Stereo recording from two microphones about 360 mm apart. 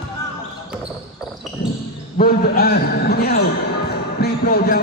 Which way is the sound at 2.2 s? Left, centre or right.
Left.